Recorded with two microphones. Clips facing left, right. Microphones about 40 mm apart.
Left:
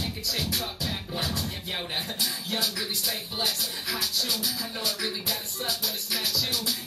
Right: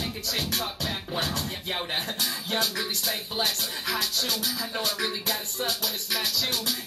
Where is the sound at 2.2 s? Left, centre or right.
Right.